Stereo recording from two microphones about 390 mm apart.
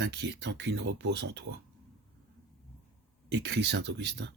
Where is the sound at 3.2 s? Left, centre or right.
Right.